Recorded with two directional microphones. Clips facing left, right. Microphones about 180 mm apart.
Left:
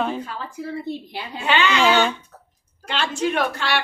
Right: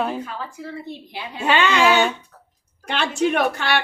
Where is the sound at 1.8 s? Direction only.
10° right (ahead or behind).